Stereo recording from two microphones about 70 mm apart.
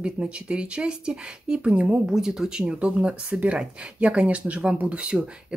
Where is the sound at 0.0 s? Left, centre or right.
Centre.